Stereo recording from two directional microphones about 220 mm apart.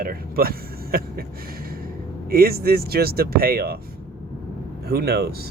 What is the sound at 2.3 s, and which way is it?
Speech, 45° right (ahead or behind).